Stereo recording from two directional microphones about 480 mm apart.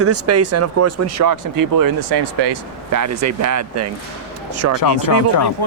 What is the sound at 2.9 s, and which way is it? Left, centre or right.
Speech, right.